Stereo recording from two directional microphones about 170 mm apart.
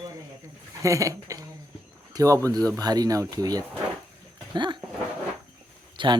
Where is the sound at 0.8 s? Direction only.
20° right (ahead or behind).